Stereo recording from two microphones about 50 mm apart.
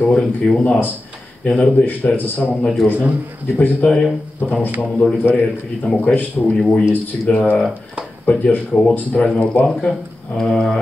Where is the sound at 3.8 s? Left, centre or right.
Left.